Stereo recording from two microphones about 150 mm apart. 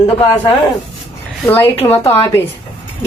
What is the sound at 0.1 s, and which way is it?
Speech, 35° left (ahead or behind).